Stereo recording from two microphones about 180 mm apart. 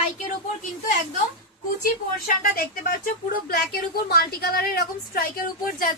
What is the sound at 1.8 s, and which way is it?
A woman's voice, 55° left (ahead or behind).